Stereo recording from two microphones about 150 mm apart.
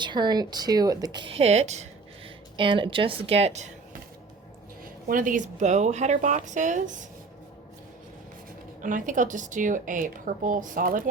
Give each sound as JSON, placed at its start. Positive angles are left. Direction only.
{"t": 0.0, "sound": "speech", "side_deg": -30}
{"t": 2.6, "sound": "speech", "side_deg": -35}
{"t": 5.0, "sound": "a woman's voice", "side_deg": -65}
{"t": 8.8, "sound": "a woman's voice", "side_deg": -60}